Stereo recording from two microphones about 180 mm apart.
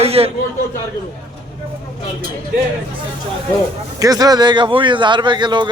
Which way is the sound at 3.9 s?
20° right (ahead or behind).